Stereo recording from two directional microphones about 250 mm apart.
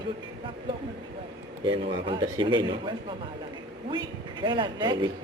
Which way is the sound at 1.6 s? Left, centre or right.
Centre.